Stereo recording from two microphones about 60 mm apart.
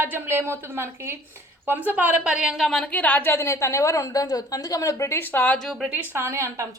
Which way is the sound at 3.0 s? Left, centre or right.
Left.